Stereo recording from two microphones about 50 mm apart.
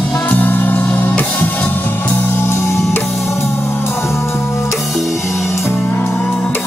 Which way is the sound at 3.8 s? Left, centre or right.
Left.